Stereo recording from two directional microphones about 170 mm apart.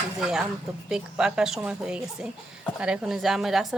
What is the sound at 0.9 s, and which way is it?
A woman's voice, 5° right (ahead or behind).